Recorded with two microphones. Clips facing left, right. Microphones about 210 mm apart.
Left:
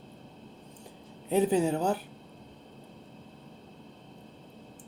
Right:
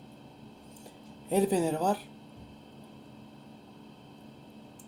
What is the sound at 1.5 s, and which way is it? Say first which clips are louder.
Speech: left 1 dB; 25° left (ahead or behind).